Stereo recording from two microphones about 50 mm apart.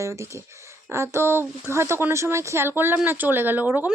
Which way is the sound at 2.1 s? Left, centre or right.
Right.